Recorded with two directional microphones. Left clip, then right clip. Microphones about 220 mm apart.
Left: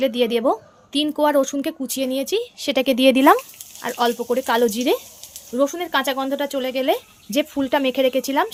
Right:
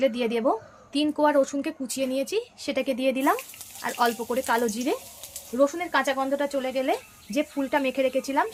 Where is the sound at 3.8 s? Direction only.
40° left (ahead or behind).